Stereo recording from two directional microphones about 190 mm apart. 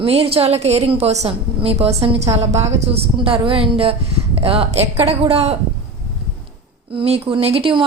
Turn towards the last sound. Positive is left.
turn(degrees=-25)  # may be behind; listen again after turning